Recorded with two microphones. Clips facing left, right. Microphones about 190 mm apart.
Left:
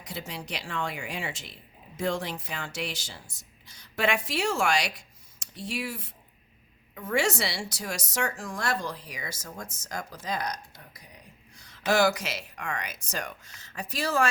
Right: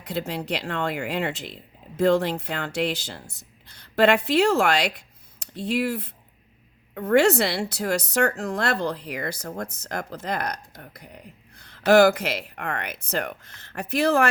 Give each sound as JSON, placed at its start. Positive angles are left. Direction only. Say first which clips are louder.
{"t": 0.0, "sound": "a woman's voice", "louder": "right 9 dB", "side_deg": -60}